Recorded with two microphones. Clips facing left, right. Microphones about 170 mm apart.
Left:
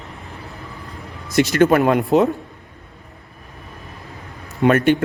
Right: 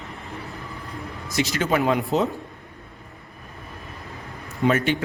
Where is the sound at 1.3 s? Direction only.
60° left (ahead or behind).